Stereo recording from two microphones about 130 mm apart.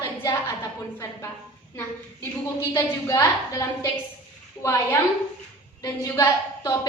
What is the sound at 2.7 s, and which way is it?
A woman's voice, 25° left (ahead or behind).